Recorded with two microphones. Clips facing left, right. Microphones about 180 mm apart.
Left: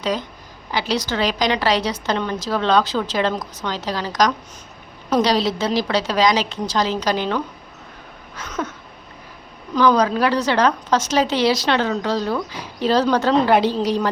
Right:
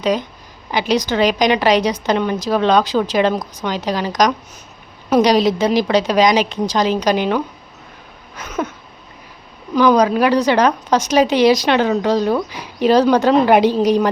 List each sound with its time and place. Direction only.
0.0 s a woman's voice: 15° right (ahead or behind)
9.7 s a woman's voice: 15° right (ahead or behind)